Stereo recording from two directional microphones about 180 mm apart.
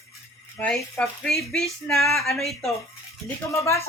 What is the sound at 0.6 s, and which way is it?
Speech, 5° left (ahead or behind).